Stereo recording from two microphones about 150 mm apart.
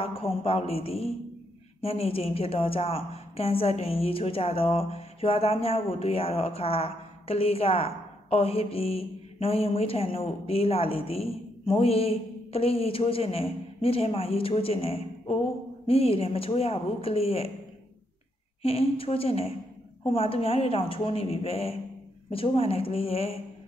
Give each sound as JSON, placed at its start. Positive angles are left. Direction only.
{"t": 0.0, "sound": "a woman's voice", "side_deg": 40}
{"t": 18.6, "sound": "a woman's voice", "side_deg": 40}